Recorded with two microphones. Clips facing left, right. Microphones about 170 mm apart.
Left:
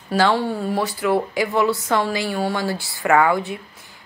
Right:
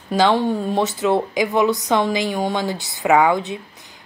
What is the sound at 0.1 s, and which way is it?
Speech, 15° right (ahead or behind).